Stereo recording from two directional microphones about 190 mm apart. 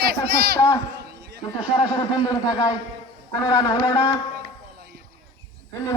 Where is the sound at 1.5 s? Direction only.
20° left (ahead or behind).